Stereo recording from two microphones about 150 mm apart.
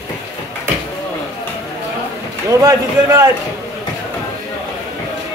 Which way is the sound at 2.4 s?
20° right (ahead or behind).